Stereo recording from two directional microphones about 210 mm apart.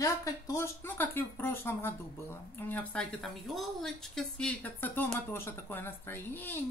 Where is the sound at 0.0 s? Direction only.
15° left (ahead or behind).